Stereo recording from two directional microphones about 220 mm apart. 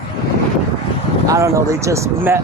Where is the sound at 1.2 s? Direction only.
15° right (ahead or behind).